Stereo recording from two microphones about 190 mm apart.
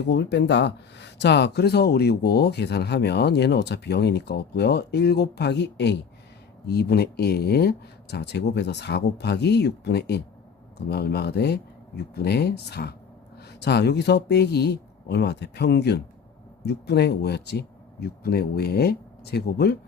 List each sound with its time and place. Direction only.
0.1 s speech: 65° left (ahead or behind)